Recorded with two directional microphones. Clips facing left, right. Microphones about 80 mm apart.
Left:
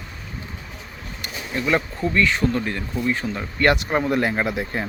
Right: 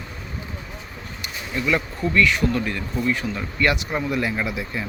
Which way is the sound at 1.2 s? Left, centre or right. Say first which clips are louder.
Left 1 dB; left.